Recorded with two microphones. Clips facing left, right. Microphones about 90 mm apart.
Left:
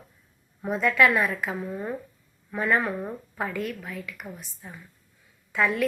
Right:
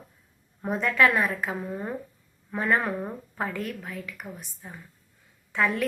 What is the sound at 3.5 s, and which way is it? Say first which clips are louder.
Speech: left 2 dB; 40° right (ahead or behind).